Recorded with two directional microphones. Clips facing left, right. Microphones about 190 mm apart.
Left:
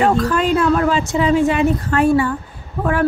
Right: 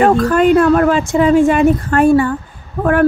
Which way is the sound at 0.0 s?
55° right (ahead or behind).